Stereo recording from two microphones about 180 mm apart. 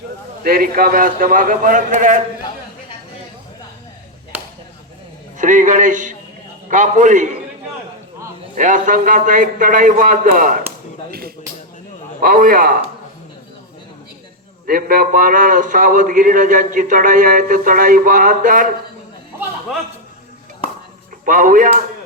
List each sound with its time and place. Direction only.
0.4 s a man's voice: 55° right (ahead or behind)
5.4 s a man's voice: 45° right (ahead or behind)
8.5 s a man's voice: 45° right (ahead or behind)
12.2 s a man's voice: 50° right (ahead or behind)
14.7 s a man's voice: 55° right (ahead or behind)
21.2 s a man's voice: 50° right (ahead or behind)